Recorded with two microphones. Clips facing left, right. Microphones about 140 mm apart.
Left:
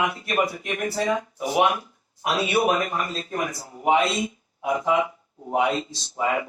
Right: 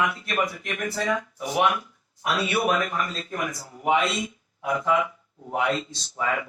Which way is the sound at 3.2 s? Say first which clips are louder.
Left 2 dB; 35° left (ahead or behind).